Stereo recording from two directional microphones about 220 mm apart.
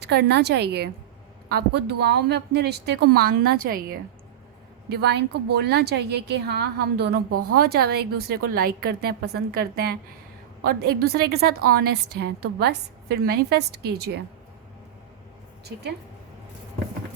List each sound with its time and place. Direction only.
0.0 s a woman's voice: 50° right (ahead or behind)